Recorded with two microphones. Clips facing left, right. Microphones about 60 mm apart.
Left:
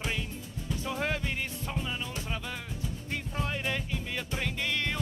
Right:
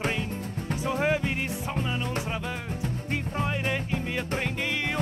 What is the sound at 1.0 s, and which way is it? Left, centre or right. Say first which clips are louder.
Music: right 7 dB; centre.